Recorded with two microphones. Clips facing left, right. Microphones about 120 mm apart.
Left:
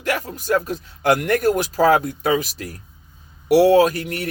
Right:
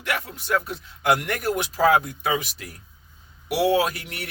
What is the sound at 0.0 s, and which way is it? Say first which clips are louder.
A man's voice: left 5 dB; 40° left (ahead or behind).